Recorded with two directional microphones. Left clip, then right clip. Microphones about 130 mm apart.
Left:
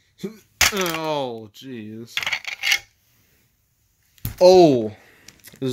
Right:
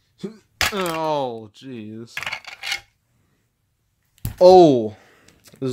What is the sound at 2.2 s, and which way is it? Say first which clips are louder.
Coin: left 5 dB; 45° right (ahead or behind).